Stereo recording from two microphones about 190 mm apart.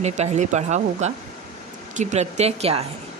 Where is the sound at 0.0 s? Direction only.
40° right (ahead or behind).